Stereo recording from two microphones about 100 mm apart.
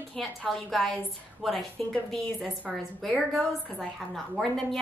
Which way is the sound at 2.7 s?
Centre (ahead or behind).